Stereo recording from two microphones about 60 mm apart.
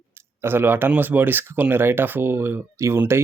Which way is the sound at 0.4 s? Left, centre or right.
Right.